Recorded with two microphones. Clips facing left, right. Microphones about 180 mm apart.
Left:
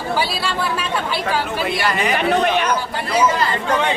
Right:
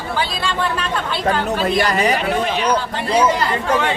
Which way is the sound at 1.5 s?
40° right (ahead or behind).